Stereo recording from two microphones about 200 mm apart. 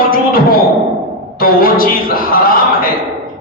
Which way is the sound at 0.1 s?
45° left (ahead or behind).